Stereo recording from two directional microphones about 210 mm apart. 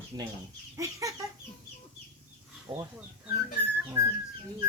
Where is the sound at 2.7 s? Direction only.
20° right (ahead or behind).